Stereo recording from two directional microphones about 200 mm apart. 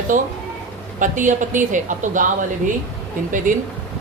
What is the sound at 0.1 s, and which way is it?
Speech, 40° right (ahead or behind).